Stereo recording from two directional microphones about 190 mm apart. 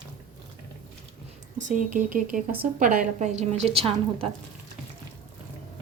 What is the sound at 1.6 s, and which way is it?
A woman's voice, 40° right (ahead or behind).